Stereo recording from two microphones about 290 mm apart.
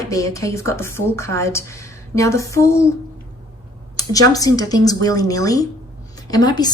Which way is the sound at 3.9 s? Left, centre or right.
Centre.